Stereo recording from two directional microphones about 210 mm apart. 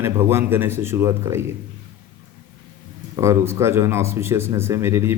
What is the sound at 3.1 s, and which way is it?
Speech, 15° right (ahead or behind).